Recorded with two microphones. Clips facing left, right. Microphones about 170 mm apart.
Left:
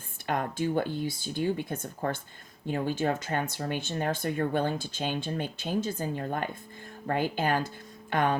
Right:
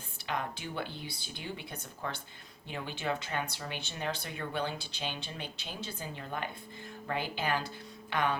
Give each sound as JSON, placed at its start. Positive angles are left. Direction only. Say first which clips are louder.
{"t": 0.3, "sound": "speech", "louder": "left 8 dB", "side_deg": 45}